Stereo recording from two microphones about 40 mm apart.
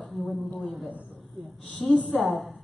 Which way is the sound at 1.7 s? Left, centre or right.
Left.